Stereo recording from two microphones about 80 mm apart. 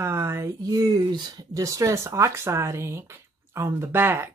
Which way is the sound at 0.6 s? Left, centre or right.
Right.